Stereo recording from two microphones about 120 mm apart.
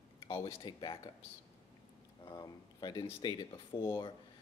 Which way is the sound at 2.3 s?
35° left (ahead or behind).